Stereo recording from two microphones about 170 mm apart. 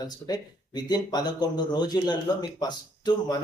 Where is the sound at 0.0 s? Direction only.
25° left (ahead or behind).